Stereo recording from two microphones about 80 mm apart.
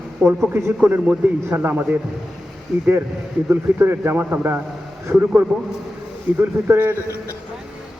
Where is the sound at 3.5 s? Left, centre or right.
Right.